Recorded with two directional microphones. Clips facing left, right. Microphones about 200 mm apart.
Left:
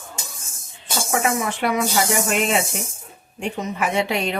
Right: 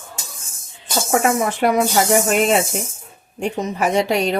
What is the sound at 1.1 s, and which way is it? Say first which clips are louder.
A woman's voice: right 4 dB; 45° right (ahead or behind).